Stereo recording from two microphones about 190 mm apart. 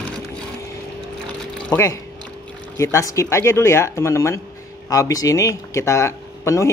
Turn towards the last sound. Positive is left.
turn(degrees=15)  # may be behind; listen again after turning